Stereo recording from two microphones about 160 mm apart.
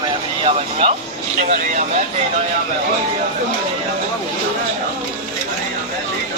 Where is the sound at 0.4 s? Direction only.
35° right (ahead or behind).